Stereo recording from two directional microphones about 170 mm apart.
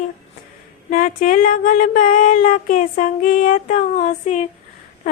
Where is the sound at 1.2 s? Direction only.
55° left (ahead or behind).